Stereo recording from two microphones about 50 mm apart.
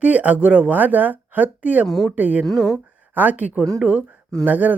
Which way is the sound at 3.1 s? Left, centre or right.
Right.